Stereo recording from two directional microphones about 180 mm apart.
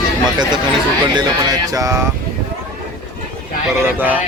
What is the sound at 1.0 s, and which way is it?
Speech, 25° right (ahead or behind).